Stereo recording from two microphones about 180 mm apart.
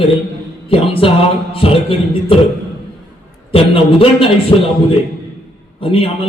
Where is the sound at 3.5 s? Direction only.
30° left (ahead or behind).